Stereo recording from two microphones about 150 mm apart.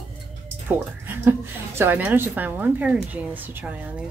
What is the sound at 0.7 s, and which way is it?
A woman's voice, 15° right (ahead or behind).